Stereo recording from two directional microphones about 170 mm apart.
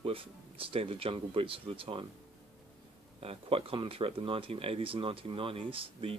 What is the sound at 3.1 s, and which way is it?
Speech, 35° right (ahead or behind).